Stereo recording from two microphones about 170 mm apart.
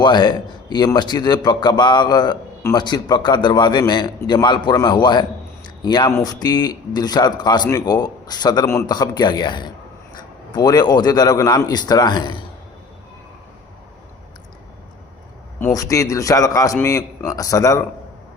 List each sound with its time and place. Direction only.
0.0 s a man's voice: 25° left (ahead or behind)
15.6 s a man's voice: 20° left (ahead or behind)